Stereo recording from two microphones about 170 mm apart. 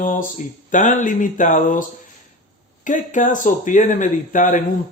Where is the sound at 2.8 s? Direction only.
50° left (ahead or behind).